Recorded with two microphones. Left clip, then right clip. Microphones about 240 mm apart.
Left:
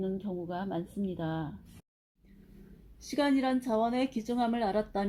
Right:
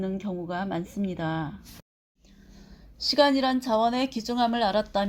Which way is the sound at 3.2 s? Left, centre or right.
Right.